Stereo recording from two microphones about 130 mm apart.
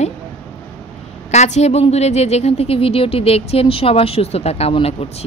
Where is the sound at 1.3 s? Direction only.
60° left (ahead or behind).